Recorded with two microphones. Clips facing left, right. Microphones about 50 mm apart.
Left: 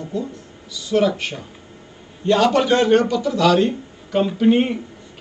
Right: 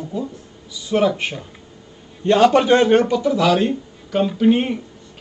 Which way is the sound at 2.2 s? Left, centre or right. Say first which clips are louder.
Right 3 dB; centre.